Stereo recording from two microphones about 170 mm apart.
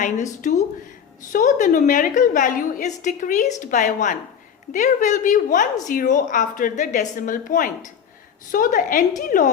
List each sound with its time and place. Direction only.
0.0 s a woman's voice: 45° left (ahead or behind)